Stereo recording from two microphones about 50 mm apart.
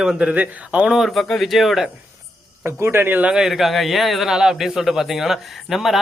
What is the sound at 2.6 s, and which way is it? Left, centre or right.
Speech, right.